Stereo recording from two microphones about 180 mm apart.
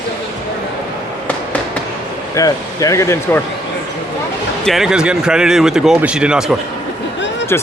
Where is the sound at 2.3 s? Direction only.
20° left (ahead or behind).